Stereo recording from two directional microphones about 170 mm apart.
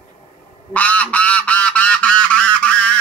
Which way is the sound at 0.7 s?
10° left (ahead or behind).